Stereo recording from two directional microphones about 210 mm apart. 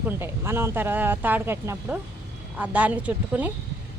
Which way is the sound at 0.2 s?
10° right (ahead or behind).